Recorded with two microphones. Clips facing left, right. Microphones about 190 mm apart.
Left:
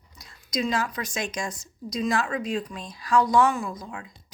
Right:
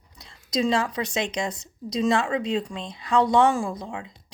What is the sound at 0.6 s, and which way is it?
Speech, 30° right (ahead or behind).